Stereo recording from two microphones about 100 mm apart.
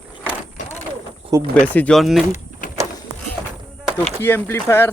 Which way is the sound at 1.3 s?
35° right (ahead or behind).